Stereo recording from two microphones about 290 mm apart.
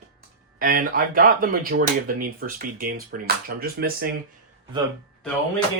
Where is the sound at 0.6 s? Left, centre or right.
Right.